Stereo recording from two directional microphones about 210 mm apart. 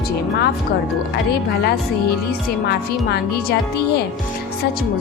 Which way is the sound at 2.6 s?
50° left (ahead or behind).